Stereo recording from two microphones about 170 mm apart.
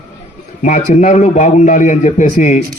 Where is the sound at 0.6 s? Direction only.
45° left (ahead or behind).